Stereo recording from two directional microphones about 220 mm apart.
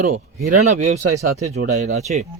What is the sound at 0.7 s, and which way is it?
Speech, 35° right (ahead or behind).